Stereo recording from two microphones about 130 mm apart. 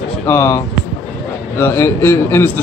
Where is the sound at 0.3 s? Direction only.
20° left (ahead or behind).